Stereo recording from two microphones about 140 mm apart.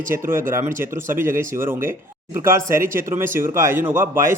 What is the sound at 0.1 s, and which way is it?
A man's voice, 15° right (ahead or behind).